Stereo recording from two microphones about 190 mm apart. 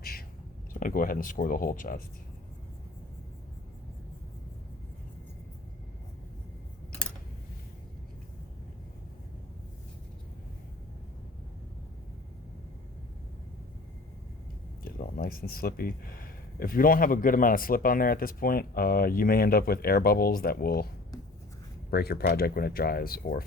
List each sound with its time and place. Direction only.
0.0 s a sound: 50° left (ahead or behind)
0.7 s speech: 45° left (ahead or behind)
14.8 s speech: 50° left (ahead or behind)
21.8 s speech: 55° left (ahead or behind)